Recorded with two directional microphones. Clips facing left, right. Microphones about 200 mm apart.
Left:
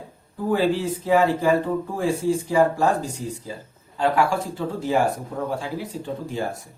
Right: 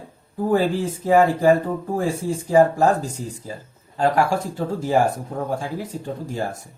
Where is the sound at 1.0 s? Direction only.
45° right (ahead or behind).